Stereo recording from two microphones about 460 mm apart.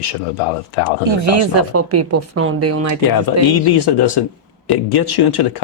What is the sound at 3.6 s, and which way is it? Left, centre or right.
Speech, left.